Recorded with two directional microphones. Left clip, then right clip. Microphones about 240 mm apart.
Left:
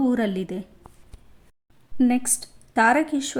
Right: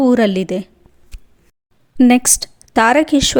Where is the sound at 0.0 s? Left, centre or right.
Right.